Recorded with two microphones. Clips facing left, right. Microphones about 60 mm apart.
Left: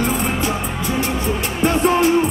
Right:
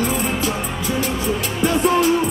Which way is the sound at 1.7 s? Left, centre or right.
Left.